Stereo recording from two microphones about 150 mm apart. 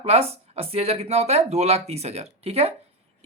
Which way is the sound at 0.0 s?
45° right (ahead or behind).